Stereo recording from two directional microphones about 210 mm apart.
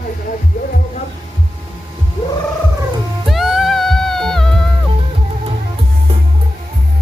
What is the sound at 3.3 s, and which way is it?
Music, centre (ahead or behind).